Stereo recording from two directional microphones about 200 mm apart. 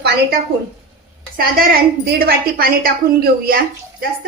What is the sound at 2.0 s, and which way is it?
Speech, 50° right (ahead or behind).